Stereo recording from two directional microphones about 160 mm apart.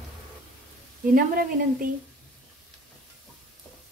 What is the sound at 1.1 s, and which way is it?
Speech, 65° right (ahead or behind).